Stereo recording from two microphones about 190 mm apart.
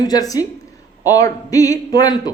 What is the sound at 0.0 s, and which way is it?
A man's voice, 20° left (ahead or behind).